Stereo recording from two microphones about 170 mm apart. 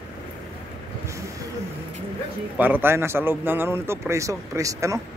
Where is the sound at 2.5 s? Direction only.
10° right (ahead or behind).